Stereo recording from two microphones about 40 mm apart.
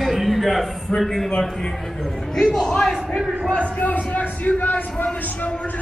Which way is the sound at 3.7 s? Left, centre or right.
Left.